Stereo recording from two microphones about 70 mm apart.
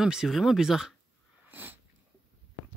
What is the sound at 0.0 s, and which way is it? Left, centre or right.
Speech, centre.